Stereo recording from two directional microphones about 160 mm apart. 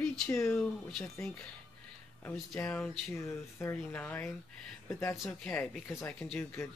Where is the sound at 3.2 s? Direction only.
15° left (ahead or behind).